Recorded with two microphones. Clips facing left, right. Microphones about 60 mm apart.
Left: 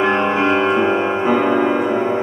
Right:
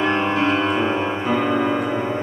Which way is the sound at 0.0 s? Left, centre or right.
Centre.